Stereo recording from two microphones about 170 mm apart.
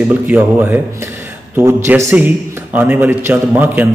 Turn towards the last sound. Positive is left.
turn(degrees=-10)  # may be behind; listen again after turning